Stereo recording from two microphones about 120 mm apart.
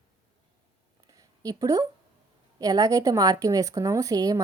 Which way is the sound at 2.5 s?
30° right (ahead or behind).